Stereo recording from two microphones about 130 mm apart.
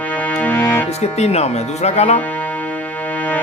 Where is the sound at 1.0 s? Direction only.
55° left (ahead or behind).